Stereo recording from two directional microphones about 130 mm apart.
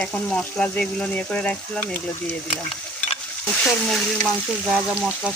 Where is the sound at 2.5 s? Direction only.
45° left (ahead or behind).